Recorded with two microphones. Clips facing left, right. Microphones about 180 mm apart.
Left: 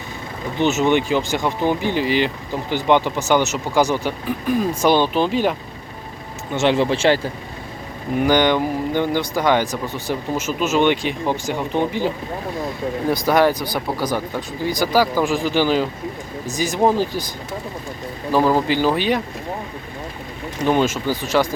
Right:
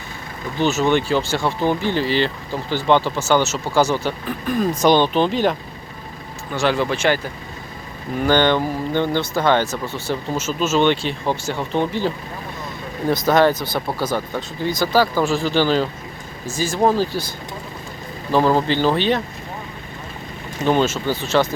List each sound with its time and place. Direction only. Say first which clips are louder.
0.6 s speech: left 1 dB; 20° left (ahead or behind)
6.5 s speech: left 2 dB; 25° left (ahead or behind)
8.2 s speech: even; 10° left (ahead or behind)
20.7 s speech: even; 10° left (ahead or behind)